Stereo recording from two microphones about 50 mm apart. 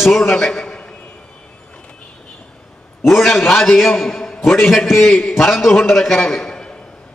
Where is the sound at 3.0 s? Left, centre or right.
Centre.